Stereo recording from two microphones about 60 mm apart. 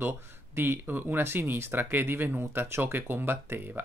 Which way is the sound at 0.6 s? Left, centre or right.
Right.